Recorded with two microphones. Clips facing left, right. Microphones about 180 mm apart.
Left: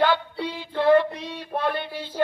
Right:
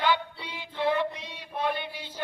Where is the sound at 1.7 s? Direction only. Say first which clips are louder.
Left 2 dB; 15° right (ahead or behind).